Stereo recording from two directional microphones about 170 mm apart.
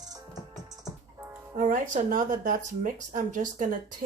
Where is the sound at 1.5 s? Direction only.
50° right (ahead or behind).